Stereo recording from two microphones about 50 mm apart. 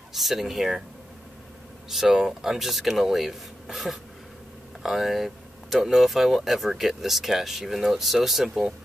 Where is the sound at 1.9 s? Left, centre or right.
Centre.